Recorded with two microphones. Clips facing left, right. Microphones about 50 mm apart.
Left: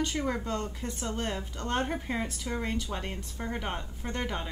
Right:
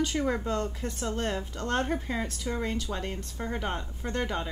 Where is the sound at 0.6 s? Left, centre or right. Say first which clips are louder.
Right 3 dB; centre.